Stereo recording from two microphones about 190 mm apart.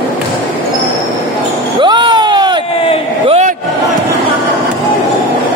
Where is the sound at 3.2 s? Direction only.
35° right (ahead or behind).